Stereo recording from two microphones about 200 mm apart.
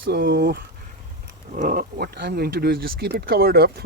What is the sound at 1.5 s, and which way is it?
Speech, 40° right (ahead or behind).